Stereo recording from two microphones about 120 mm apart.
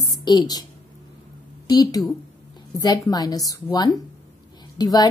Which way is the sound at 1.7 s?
35° left (ahead or behind).